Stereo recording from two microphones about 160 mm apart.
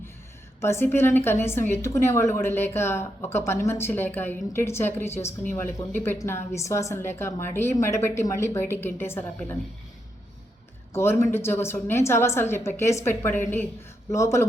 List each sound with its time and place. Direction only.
0.6 s a woman's voice: 15° left (ahead or behind)
10.9 s a woman's voice: 15° left (ahead or behind)